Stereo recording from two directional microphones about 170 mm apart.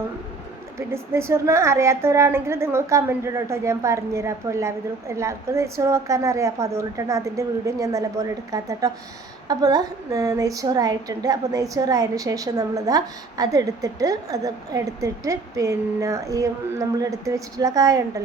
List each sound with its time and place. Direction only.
0.8 s a woman's voice: 15° right (ahead or behind)